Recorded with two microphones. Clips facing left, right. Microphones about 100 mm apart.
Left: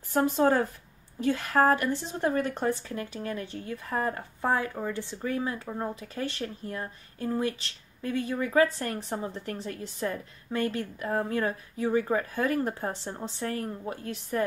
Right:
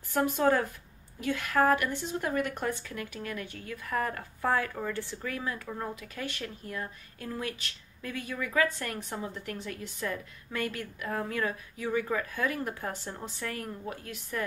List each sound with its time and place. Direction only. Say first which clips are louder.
0.1 s speech: left 2 dB; 30° left (ahead or behind)